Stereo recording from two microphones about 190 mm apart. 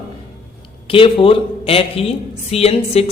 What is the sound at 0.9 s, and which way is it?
A woman's voice, 25° left (ahead or behind).